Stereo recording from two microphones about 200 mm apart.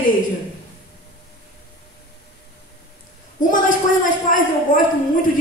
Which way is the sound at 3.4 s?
40° left (ahead or behind).